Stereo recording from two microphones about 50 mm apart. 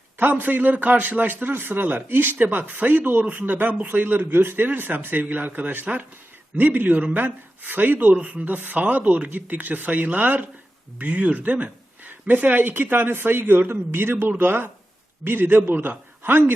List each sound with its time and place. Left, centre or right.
0.2 s a man's voice: right